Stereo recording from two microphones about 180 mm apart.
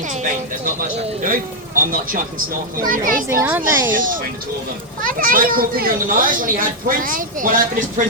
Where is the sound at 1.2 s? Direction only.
50° right (ahead or behind).